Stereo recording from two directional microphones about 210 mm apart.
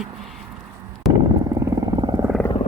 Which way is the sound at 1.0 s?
Centre (ahead or behind).